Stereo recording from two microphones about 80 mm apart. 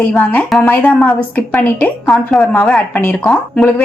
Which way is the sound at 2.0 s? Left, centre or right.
Centre.